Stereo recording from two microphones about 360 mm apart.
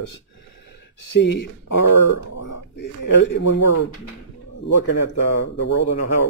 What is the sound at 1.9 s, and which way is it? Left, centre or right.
Speech, left.